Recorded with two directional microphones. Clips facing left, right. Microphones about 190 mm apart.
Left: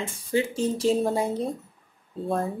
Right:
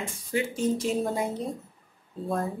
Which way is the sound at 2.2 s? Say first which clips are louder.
Left 2 dB; 25° left (ahead or behind).